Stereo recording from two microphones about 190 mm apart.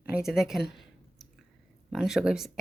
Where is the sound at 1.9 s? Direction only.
Centre (ahead or behind).